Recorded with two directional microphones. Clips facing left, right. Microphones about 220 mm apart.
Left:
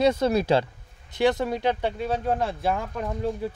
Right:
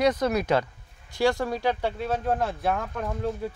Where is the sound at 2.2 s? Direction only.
Centre (ahead or behind).